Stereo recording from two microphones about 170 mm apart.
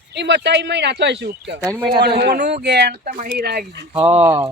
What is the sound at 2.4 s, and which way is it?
Speech, 80° right.